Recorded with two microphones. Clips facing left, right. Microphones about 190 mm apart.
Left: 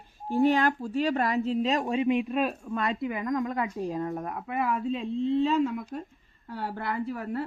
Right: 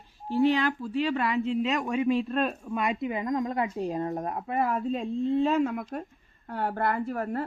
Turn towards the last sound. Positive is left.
turn(degrees=-50)  # may be behind; listen again after turning